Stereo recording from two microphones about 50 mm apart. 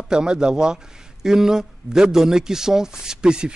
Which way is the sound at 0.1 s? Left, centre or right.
Centre.